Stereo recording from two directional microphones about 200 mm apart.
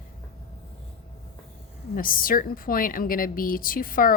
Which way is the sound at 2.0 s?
45° left (ahead or behind).